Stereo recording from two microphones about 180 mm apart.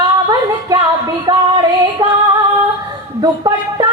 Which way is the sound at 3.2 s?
20° right (ahead or behind).